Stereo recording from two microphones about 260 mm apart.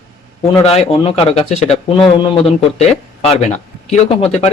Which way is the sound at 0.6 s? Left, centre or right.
Left.